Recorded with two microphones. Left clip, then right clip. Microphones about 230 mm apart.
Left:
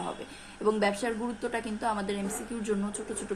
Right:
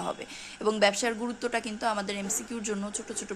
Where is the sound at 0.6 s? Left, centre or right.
Right.